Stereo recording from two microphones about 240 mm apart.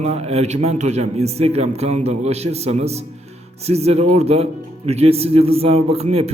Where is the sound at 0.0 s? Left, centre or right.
Right.